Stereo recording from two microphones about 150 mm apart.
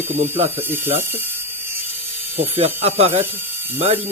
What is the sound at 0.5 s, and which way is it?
Speech, 15° right (ahead or behind).